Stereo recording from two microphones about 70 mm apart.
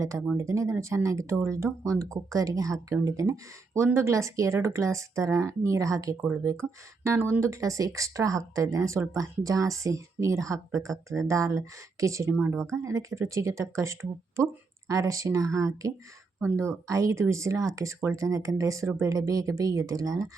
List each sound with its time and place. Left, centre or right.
0.3 s speech: right
12.3 s speech: right
12.7 s speech: right